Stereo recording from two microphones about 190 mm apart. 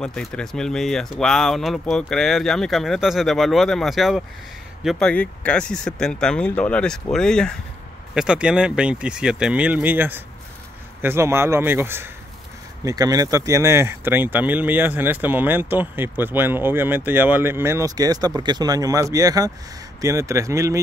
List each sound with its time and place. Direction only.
0.0 s speech: 5° left (ahead or behind); by 20.8 s 15° right (ahead or behind)